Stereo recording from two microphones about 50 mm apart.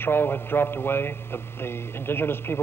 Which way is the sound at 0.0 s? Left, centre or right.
Left.